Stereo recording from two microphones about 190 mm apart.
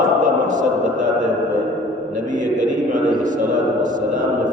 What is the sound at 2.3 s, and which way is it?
A man's voice, 40° right (ahead or behind).